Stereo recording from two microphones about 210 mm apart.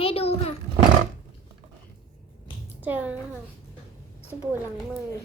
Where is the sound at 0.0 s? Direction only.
30° left (ahead or behind).